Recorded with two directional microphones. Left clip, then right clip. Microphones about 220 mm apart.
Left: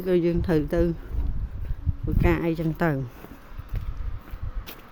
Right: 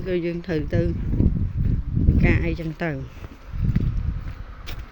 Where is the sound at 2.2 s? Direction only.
20° left (ahead or behind).